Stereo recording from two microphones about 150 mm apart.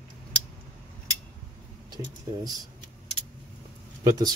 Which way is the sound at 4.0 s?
25° right (ahead or behind).